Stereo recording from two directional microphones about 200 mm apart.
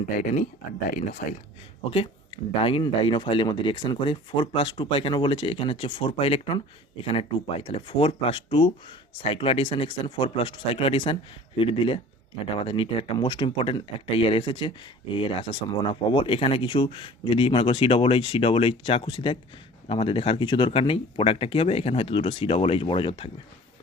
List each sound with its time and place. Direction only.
0.2 s speech: 40° left (ahead or behind)
2.6 s speech: 25° left (ahead or behind)